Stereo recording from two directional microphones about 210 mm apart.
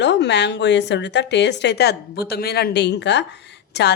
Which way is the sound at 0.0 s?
55° left (ahead or behind).